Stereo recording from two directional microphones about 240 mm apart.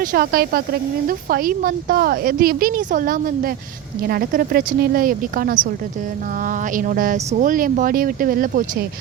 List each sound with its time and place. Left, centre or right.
0.0 s speech: right